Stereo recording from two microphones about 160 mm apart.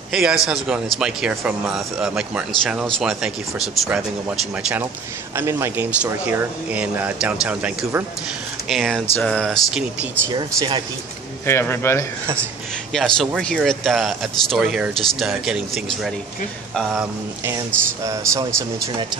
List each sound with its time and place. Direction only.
0.1 s speech: 5° right (ahead or behind)
5.3 s speech: 15° right (ahead or behind)
8.6 s speech: centre (ahead or behind)
10.2 s speech: 25° right (ahead or behind)
11.4 s speech: 15° left (ahead or behind)
12.9 s speech: centre (ahead or behind)
18.0 s speech: 20° right (ahead or behind)